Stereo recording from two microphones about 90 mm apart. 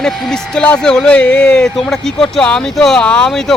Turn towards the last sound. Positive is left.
turn(degrees=5)  # may be behind; listen again after turning